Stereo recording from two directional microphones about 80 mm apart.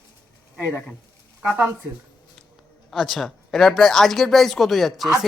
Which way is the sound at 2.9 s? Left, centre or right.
Centre.